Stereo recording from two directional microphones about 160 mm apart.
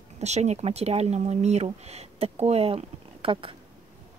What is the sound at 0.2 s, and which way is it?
Speech, 45° right (ahead or behind).